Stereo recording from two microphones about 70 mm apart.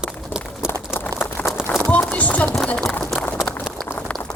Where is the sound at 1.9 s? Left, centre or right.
Left.